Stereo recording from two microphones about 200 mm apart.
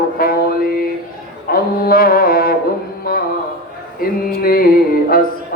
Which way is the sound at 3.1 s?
50° left (ahead or behind).